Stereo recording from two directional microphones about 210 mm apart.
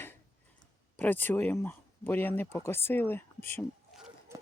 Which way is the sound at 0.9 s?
10° left (ahead or behind).